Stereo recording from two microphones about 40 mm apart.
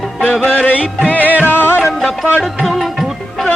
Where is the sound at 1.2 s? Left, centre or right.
Right.